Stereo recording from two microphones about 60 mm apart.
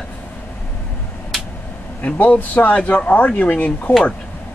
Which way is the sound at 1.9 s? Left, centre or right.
Left.